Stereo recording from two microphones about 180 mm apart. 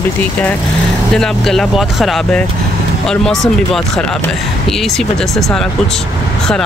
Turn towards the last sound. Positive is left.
turn(degrees=5)  # may be behind; listen again after turning